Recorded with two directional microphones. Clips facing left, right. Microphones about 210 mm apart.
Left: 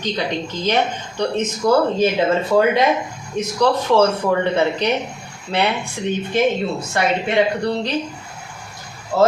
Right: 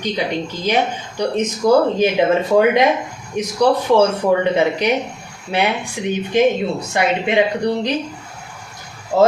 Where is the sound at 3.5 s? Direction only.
15° right (ahead or behind).